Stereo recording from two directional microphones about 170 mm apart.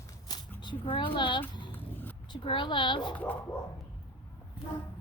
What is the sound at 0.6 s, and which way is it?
A child's voice, 25° left (ahead or behind).